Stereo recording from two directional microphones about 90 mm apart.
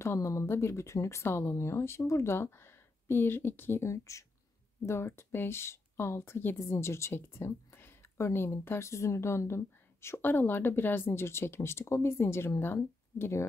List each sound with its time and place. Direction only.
0.0 s a woman's voice: 30° left (ahead or behind)